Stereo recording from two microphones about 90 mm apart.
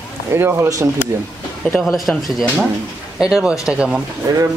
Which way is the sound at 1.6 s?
Centre (ahead or behind).